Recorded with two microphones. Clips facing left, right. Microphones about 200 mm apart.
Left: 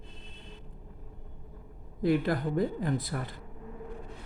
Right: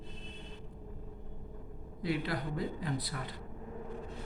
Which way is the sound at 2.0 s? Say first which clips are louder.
Left 8 dB; 50° left (ahead or behind).